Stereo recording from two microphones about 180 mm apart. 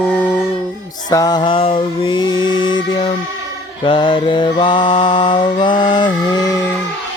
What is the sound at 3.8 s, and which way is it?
Mantra, 30° left (ahead or behind).